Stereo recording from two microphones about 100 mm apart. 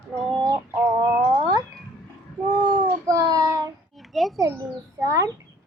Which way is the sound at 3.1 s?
40° right (ahead or behind).